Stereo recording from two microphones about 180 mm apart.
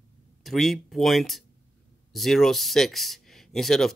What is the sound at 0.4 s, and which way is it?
Speech, centre (ahead or behind).